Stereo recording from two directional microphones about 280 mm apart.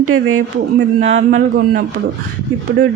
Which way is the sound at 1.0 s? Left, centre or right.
Right.